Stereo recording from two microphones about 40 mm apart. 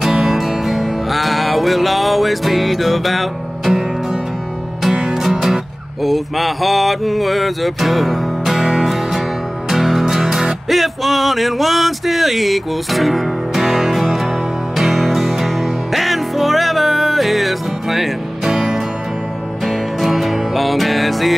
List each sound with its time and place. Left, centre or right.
0.0 s music: centre
5.1 s music: centre
8.5 s music: centre
18.5 s music: centre
20.0 s music: centre